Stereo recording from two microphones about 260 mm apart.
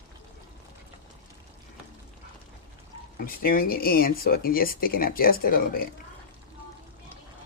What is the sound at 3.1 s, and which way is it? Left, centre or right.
Speech, left.